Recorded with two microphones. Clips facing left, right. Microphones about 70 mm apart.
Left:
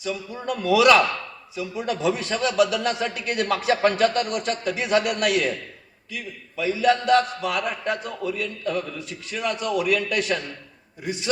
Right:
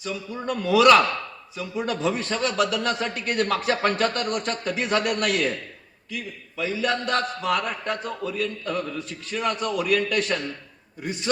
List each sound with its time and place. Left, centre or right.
0.4 s a man's voice: right
6.6 s a man's voice: right